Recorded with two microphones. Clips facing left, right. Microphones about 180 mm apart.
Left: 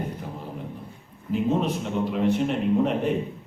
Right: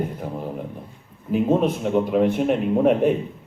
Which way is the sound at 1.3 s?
50° right (ahead or behind).